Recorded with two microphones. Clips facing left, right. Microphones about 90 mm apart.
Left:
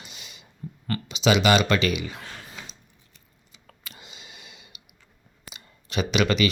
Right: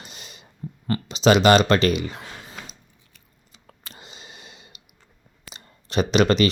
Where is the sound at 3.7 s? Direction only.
35° right (ahead or behind).